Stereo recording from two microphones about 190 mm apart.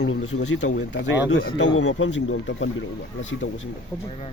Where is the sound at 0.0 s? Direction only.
90° left.